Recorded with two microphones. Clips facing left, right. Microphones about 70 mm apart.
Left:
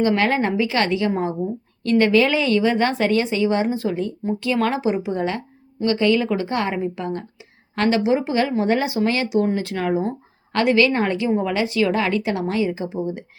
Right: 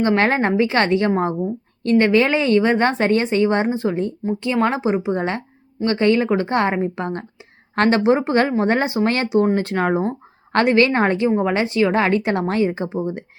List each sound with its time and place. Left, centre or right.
0.0 s speech: right
1.8 s speech: right